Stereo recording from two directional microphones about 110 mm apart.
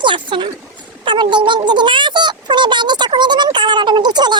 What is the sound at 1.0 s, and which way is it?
A child's voice, 45° right (ahead or behind).